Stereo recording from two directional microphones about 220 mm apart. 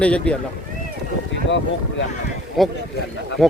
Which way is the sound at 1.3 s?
55° left (ahead or behind).